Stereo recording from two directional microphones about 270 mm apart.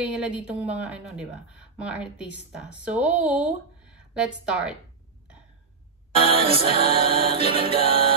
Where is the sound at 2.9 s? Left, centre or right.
Centre.